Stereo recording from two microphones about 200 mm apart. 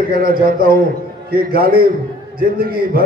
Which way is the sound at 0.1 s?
45° right (ahead or behind).